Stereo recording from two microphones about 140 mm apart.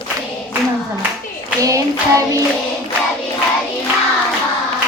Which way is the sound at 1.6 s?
25° right (ahead or behind).